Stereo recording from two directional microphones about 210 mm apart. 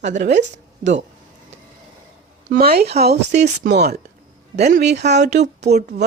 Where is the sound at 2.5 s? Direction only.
45° right (ahead or behind).